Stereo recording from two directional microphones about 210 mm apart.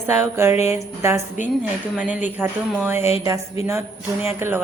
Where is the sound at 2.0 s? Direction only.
5° right (ahead or behind).